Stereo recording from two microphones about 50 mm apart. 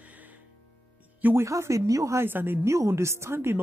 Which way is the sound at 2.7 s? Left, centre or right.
Right.